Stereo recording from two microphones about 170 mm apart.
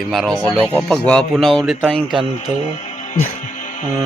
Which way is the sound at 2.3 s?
40° left (ahead or behind).